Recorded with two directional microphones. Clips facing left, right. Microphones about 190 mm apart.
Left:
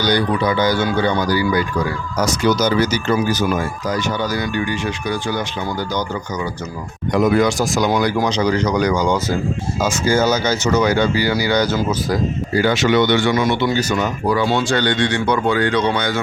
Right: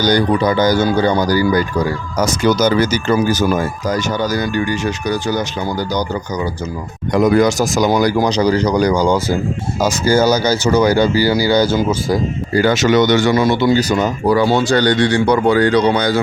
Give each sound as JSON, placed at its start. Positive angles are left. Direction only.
{"t": 0.0, "sound": "speech", "side_deg": -45}
{"t": 7.1, "sound": "speech", "side_deg": -40}
{"t": 12.5, "sound": "speech", "side_deg": -45}